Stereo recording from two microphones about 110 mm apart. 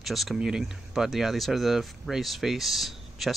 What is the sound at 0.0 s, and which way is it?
Speech, centre (ahead or behind).